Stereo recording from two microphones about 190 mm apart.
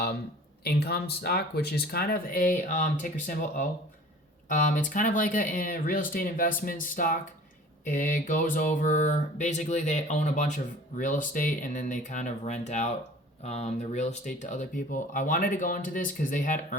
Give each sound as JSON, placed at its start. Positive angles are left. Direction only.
{"t": 0.6, "sound": "speech", "side_deg": 55}
{"t": 7.9, "sound": "a sound", "side_deg": 45}
{"t": 13.4, "sound": "speech", "side_deg": 35}